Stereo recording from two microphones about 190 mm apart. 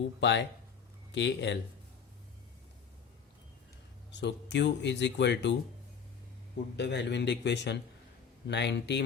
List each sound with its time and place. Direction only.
0.2 s speech: 70° left (ahead or behind)
4.1 s speech: 65° left (ahead or behind)
6.7 s speech: 65° left (ahead or behind)